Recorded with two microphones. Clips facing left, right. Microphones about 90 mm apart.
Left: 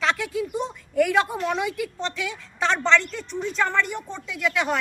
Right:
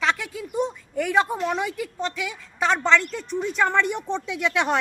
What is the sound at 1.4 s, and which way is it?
Speech, 20° right (ahead or behind).